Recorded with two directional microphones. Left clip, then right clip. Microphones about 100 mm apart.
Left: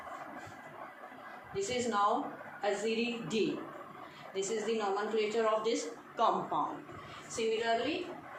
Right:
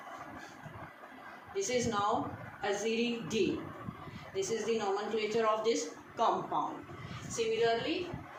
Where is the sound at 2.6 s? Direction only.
10° left (ahead or behind).